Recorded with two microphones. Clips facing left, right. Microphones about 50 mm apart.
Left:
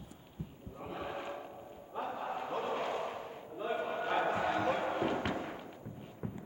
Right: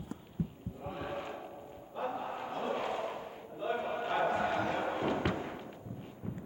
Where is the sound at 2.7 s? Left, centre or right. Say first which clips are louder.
Right 1 dB; centre.